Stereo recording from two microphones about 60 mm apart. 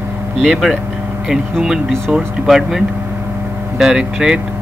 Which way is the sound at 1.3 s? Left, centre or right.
Centre.